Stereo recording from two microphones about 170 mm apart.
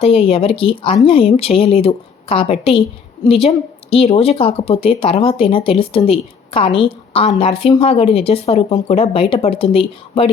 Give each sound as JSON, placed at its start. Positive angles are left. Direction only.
{"t": 0.0, "sound": "a woman's voice", "side_deg": 35}